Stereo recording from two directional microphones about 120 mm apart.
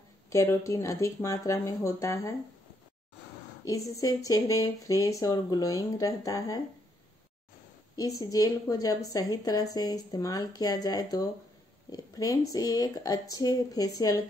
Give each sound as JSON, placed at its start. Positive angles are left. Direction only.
{"t": 0.3, "sound": "speech", "side_deg": 25}
{"t": 3.9, "sound": "speech", "side_deg": 30}
{"t": 7.9, "sound": "a woman's voice", "side_deg": 30}